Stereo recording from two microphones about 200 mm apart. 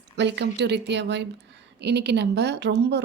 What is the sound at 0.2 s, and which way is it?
A woman's voice, 60° right (ahead or behind).